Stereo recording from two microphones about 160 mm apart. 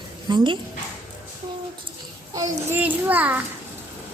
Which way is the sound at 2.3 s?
20° right (ahead or behind).